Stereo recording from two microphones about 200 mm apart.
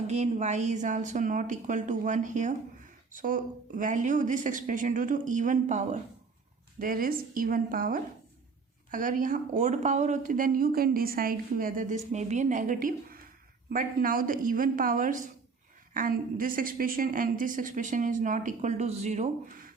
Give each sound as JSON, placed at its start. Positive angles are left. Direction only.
{"t": 0.1, "sound": "a woman's voice", "side_deg": -35}